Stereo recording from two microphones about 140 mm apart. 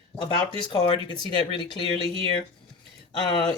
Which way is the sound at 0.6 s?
40° left (ahead or behind).